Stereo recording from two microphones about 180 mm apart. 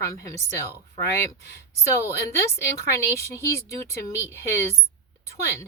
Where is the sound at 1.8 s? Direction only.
15° left (ahead or behind).